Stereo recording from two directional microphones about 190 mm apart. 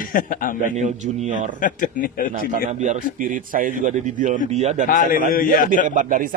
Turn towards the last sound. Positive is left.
turn(degrees=-45)  # may be behind; listen again after turning